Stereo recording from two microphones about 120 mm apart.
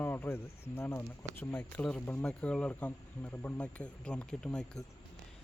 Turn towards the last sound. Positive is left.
turn(degrees=5)  # may be behind; listen again after turning